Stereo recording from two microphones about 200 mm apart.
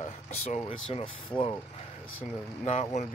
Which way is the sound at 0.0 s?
35° left (ahead or behind).